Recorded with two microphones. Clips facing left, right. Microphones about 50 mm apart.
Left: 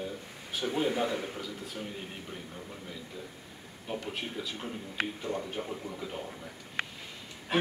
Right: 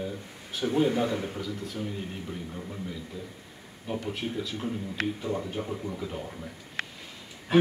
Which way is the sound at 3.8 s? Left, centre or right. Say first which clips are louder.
Right 4 dB; centre.